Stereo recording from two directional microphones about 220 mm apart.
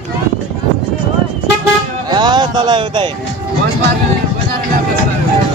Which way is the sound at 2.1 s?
20° right (ahead or behind).